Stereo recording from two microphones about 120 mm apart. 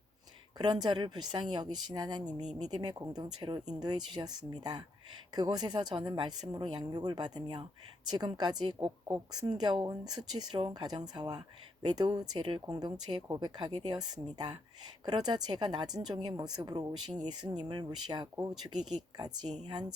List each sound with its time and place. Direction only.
0.6 s speech: 35° right (ahead or behind)